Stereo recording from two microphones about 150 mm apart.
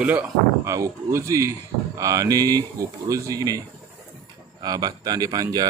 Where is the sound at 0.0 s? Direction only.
10° right (ahead or behind).